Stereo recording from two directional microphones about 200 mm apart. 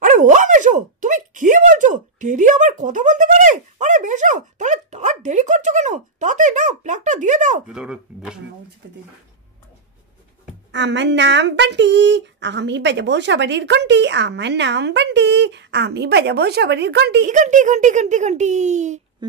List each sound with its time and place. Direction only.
0.0 s dog: 40° right (ahead or behind)
7.6 s speech: 5° right (ahead or behind)
10.7 s speech: 60° right (ahead or behind)
17.3 s speech: 40° right (ahead or behind)